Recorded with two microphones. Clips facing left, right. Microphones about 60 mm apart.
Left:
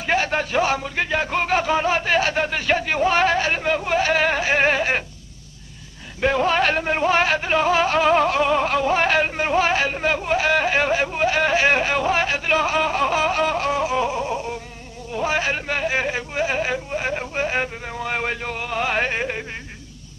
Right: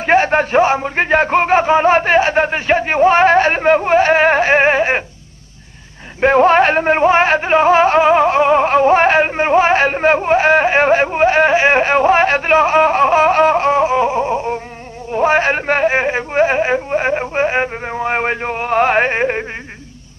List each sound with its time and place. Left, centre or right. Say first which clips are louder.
0.0 s speech: right 9 dB; right
6.2 s music: right 9 dB; right
15.0 s speech: right 9 dB; right